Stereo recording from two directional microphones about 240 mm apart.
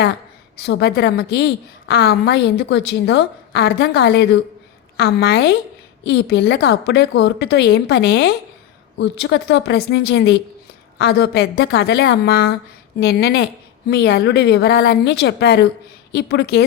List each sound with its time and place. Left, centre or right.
0.5 s a woman's voice: left